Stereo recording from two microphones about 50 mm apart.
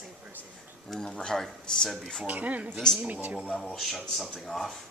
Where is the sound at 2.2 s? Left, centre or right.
Right.